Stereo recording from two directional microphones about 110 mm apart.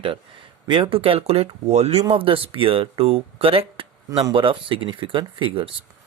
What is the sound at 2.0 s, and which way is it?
Speech, 55° right (ahead or behind).